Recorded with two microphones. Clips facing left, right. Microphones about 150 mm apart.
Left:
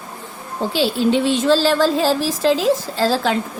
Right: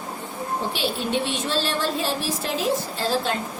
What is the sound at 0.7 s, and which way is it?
A woman's voice, 90° left.